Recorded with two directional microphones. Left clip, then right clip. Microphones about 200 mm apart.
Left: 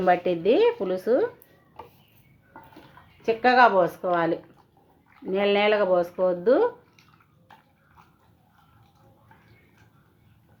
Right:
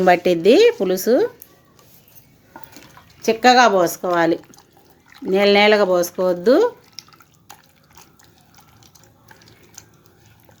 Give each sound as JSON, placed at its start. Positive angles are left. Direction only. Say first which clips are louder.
{"t": 0.0, "sound": "speech", "louder": "right 8 dB", "side_deg": -45}
{"t": 3.2, "sound": "speech", "louder": "right 5 dB", "side_deg": -50}